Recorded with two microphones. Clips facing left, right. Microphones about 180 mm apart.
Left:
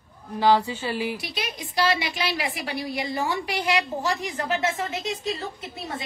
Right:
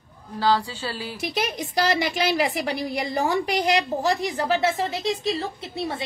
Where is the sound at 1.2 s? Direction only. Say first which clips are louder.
Right 6 dB; 45° right (ahead or behind).